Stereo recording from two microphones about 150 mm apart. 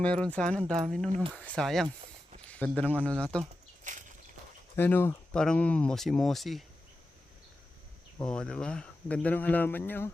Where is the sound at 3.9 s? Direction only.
55° right (ahead or behind).